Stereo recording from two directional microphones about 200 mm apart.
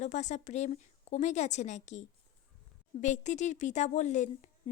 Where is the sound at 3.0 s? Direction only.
35° left (ahead or behind).